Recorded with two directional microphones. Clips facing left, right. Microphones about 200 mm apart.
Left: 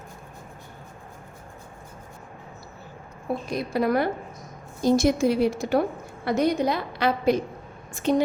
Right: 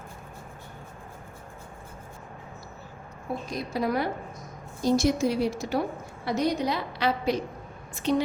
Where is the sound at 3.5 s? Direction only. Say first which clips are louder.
Left 4 dB; 60° left (ahead or behind).